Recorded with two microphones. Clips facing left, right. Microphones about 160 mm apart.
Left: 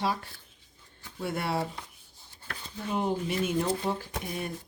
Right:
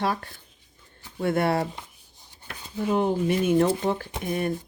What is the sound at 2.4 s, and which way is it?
Chopping, 15° right (ahead or behind).